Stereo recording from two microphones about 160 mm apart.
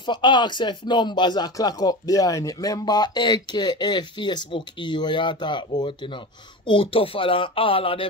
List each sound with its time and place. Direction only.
0.0 s speech: 30° left (ahead or behind)